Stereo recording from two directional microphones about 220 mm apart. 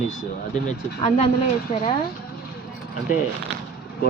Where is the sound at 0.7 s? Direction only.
30° left (ahead or behind).